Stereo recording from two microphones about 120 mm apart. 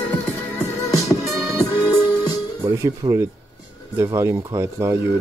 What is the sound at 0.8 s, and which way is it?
Music, 30° left (ahead or behind).